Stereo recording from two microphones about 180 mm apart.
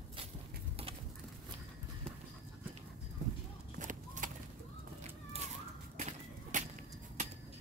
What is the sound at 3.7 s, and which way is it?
Horse, 45° right (ahead or behind).